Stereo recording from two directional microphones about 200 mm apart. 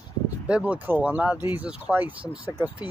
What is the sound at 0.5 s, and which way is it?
Speech, 5° right (ahead or behind).